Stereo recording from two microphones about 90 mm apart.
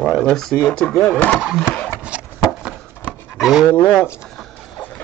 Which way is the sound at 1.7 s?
20° left (ahead or behind).